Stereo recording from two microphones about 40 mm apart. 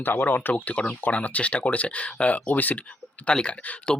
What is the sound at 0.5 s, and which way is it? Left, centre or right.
Speech, left.